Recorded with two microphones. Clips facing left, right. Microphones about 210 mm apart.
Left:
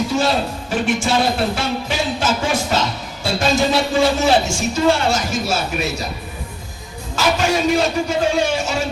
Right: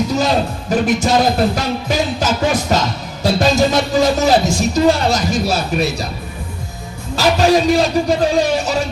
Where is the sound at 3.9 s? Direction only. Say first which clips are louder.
Right 2 dB; 40° right (ahead or behind).